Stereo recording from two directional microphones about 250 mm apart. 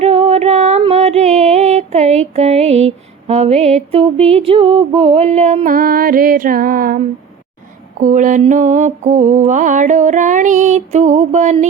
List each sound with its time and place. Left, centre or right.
0.0 s music: right
8.0 s mantra: right